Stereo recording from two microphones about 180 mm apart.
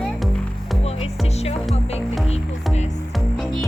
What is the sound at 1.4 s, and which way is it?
Music, 35° left (ahead or behind).